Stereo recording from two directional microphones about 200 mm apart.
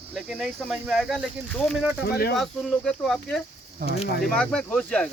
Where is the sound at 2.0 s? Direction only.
50° left (ahead or behind).